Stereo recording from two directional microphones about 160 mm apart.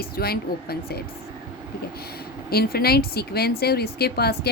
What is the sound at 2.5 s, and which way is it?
A woman's voice, 75° left (ahead or behind).